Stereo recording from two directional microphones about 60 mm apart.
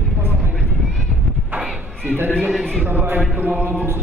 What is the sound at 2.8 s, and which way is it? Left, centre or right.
Mantra, right.